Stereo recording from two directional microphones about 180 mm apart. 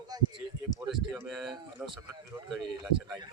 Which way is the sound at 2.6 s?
25° right (ahead or behind).